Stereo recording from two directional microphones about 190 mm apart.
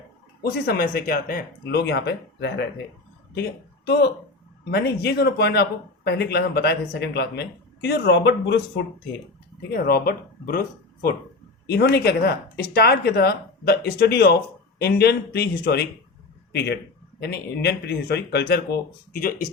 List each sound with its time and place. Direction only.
0.4 s speech: 55° left (ahead or behind)
9.6 s speech: 50° left (ahead or behind)